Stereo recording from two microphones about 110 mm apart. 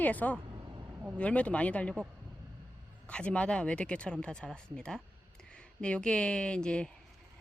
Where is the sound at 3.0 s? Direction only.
10° left (ahead or behind).